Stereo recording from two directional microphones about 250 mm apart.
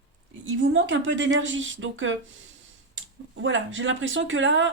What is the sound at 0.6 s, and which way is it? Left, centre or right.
Speech, right.